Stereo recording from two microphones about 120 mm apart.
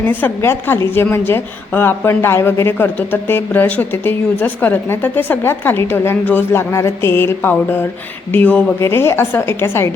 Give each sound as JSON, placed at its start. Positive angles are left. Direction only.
{"t": 0.0, "sound": "a woman's voice", "side_deg": 15}